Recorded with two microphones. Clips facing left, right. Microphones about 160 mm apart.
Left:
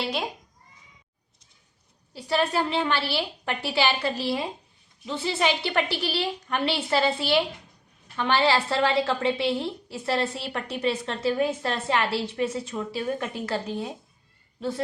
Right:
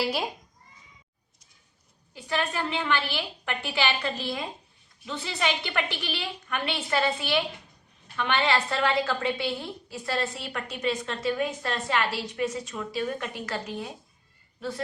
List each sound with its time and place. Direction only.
0.0 s a child's voice: 5° right (ahead or behind)
2.1 s a woman's voice: 35° left (ahead or behind)